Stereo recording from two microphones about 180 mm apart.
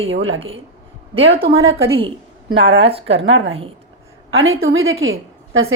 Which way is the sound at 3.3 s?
90° right.